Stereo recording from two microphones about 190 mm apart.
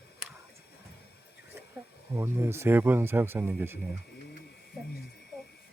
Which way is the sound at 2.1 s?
15° right (ahead or behind).